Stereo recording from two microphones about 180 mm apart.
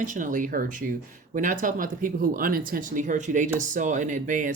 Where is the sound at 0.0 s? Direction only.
45° right (ahead or behind).